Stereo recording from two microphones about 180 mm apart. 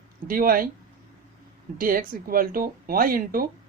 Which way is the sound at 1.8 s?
50° right (ahead or behind).